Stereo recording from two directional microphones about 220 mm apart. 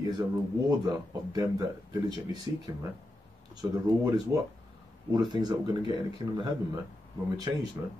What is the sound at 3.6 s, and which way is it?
Speech, 20° right (ahead or behind).